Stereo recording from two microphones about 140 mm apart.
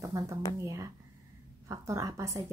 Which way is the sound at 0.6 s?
20° right (ahead or behind).